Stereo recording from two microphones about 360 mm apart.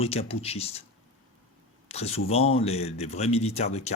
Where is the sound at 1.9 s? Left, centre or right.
Centre.